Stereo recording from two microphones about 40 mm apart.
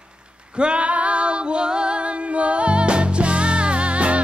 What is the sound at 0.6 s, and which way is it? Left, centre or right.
Female singing, right.